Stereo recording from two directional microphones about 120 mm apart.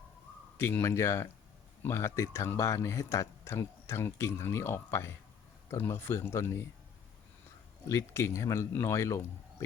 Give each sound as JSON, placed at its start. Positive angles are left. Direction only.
{"t": 0.5, "sound": "speech", "side_deg": 20}
{"t": 7.9, "sound": "speech", "side_deg": 25}